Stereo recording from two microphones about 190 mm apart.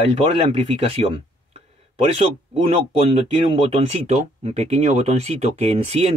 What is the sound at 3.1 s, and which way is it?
Speech, 30° right (ahead or behind).